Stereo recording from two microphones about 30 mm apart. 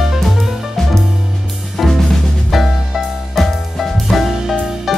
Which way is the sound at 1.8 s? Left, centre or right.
Centre.